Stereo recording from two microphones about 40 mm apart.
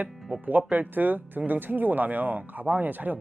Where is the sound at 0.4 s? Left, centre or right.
Right.